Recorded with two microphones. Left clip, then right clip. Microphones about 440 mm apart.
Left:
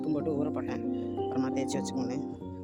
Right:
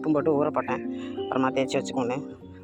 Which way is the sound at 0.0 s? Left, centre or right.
Left.